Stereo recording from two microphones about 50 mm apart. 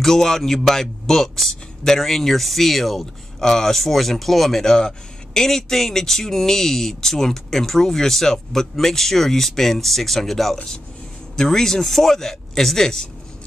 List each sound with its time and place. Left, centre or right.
0.0 s a man's voice: centre